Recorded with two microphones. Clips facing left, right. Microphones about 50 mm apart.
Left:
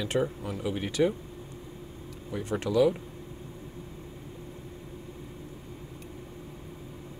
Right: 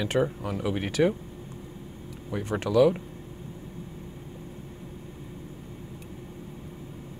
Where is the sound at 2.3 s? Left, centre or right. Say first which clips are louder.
Right 2 dB; right.